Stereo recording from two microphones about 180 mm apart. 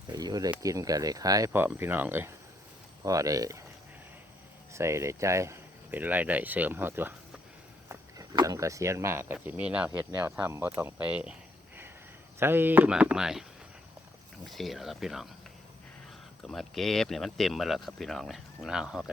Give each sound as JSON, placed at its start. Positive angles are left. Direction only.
{"t": 0.1, "sound": "a sound", "side_deg": -20}
{"t": 0.6, "sound": "speech", "side_deg": -20}
{"t": 4.7, "sound": "speech", "side_deg": -15}
{"t": 12.4, "sound": "speech", "side_deg": -10}
{"t": 14.4, "sound": "speech", "side_deg": 0}
{"t": 16.4, "sound": "speech", "side_deg": 0}